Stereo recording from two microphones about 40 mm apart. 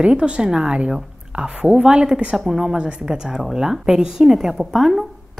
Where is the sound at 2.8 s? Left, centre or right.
Right.